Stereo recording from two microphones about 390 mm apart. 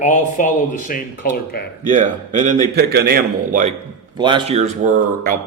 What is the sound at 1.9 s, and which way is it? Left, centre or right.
A man's voice, centre.